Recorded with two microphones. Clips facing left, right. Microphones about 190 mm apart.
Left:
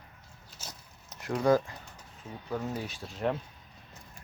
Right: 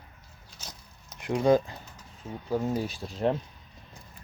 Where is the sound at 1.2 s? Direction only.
20° right (ahead or behind).